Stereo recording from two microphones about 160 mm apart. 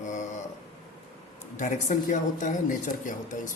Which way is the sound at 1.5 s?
50° left (ahead or behind).